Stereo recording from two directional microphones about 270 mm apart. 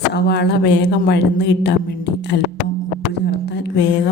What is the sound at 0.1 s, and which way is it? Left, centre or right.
A woman's voice, left.